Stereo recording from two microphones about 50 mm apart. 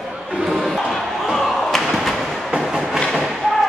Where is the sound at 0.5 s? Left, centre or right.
Centre.